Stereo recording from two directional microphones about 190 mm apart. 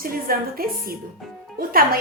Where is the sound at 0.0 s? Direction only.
50° right (ahead or behind).